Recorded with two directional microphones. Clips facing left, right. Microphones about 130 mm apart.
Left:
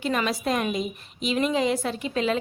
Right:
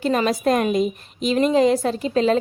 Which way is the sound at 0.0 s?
40° right (ahead or behind).